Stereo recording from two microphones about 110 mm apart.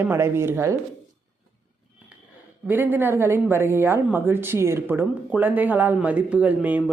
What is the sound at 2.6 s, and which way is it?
Speech, 15° right (ahead or behind).